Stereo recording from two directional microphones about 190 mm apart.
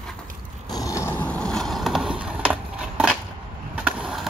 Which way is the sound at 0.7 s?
15° left (ahead or behind).